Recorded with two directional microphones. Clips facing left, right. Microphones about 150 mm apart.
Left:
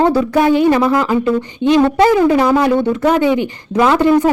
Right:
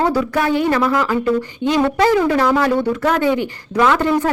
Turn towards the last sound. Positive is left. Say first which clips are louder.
# left 4 dB
turn(degrees=15)  # may be behind; listen again after turning